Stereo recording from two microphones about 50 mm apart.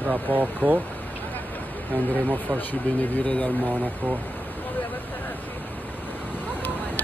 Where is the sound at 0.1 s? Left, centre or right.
Right.